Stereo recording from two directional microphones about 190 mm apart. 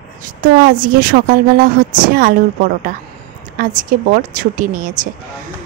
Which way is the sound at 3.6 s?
45° right (ahead or behind).